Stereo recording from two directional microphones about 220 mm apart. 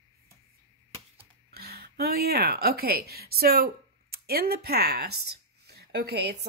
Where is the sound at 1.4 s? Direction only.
45° right (ahead or behind).